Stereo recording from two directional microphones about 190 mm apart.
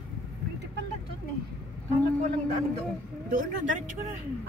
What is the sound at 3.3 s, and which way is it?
Speech, 45° right (ahead or behind).